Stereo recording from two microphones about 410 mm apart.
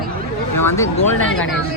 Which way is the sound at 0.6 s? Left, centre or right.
Centre.